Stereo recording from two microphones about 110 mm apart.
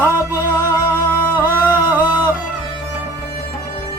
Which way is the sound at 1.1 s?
15° left (ahead or behind).